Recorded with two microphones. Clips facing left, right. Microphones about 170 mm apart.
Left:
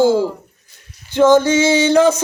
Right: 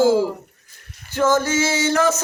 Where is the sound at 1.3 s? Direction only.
20° left (ahead or behind).